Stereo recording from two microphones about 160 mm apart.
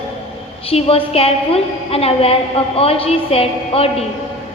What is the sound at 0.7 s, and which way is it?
A woman's voice, 35° left (ahead or behind).